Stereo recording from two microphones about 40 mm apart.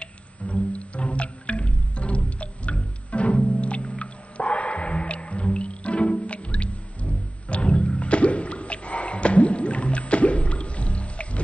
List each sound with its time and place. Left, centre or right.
0.0 s music: left